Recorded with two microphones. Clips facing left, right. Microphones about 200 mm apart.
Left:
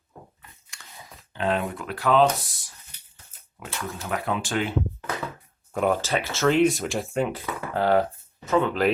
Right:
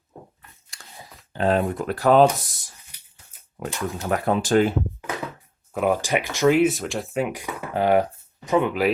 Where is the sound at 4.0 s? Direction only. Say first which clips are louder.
Right 6 dB; 40° right (ahead or behind).